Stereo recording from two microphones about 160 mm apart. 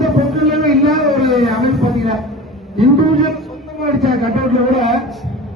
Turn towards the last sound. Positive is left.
turn(degrees=0)  # may be behind; listen again after turning